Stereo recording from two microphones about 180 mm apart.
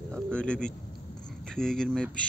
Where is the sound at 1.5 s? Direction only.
5° left (ahead or behind).